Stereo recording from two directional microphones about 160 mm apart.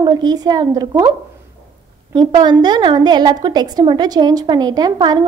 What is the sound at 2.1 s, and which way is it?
A woman's voice, 30° right (ahead or behind).